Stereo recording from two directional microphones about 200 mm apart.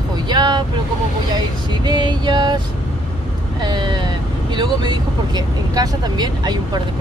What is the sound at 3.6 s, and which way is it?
Vehicle, 20° right (ahead or behind).